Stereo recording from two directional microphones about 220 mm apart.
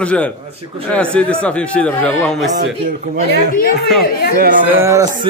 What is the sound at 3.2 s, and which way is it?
Speech, 45° left (ahead or behind).